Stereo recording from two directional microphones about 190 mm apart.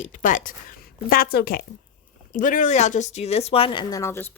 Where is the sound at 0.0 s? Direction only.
45° left (ahead or behind).